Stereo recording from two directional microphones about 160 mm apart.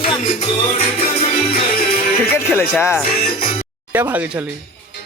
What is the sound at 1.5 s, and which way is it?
Music, 70° left (ahead or behind).